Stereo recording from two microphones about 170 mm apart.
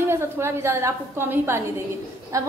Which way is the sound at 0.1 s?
15° right (ahead or behind).